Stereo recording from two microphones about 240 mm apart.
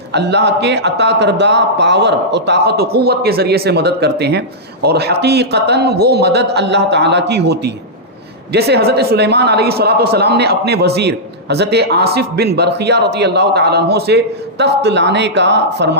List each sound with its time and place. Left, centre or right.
0.1 s a man's voice: right